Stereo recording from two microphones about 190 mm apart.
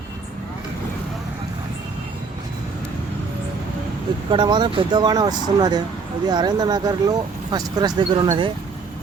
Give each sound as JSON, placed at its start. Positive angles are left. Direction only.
{"t": 4.3, "sound": "speech", "side_deg": -25}